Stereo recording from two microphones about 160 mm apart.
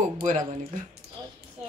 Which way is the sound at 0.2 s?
45° right (ahead or behind).